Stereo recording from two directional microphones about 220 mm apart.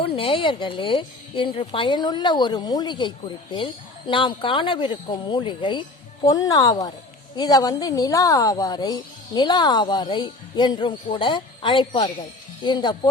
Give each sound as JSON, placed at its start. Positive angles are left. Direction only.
{"t": 0.0, "sound": "speech", "side_deg": 25}